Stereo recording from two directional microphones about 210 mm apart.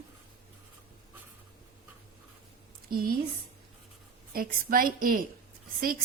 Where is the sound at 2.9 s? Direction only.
45° right (ahead or behind).